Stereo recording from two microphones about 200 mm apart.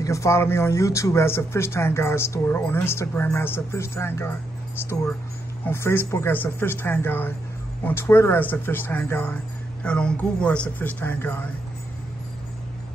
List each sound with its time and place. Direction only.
0.0 s speech: 15° left (ahead or behind)
5.7 s speech: 10° left (ahead or behind)